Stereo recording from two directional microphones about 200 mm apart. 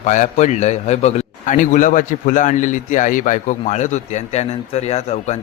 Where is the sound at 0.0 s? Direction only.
35° left (ahead or behind).